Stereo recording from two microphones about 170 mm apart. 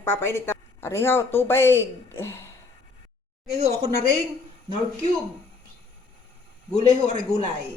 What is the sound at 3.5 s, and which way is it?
Speech, 40° right (ahead or behind).